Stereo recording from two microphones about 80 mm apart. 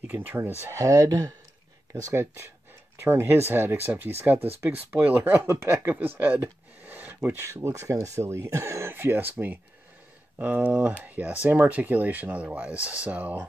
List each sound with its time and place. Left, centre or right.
0.0 s speech: right
0.7 s speech: right
1.9 s speech: right
8.9 s speech: right